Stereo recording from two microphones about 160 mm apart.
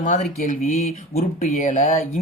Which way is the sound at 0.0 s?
50° left (ahead or behind).